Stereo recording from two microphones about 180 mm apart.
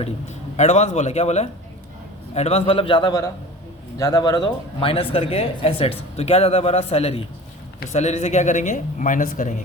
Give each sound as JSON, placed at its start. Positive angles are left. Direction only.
{"t": 0.5, "sound": "a man's voice", "side_deg": 40}